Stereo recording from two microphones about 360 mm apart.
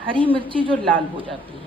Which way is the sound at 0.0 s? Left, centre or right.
Centre.